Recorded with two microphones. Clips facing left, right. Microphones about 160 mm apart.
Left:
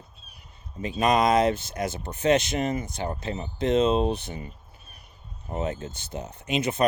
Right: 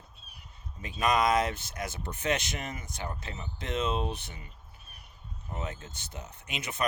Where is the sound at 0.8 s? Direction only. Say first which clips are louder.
Left 5 dB; 25° left (ahead or behind).